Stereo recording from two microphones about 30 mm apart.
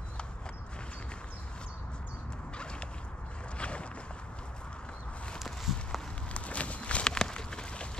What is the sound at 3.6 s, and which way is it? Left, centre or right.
Boat, left.